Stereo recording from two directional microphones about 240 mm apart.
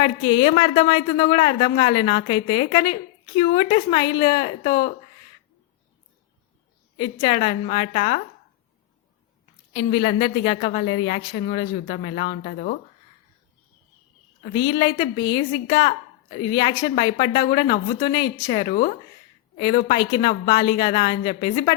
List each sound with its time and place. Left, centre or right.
0.0 s a woman's voice: left
7.0 s a woman's voice: centre
9.7 s a woman's voice: left
14.4 s a woman's voice: centre
18.7 s speech: left
19.5 s a woman's voice: left